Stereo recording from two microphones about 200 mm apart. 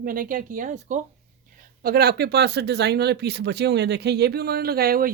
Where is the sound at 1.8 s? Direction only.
50° right (ahead or behind).